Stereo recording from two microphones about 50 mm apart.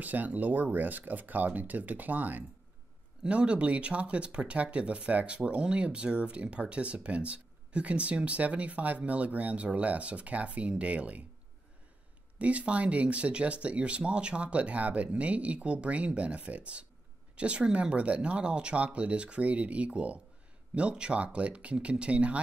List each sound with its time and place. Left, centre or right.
0.0 s speech: right
3.3 s speech: right
12.4 s speech: right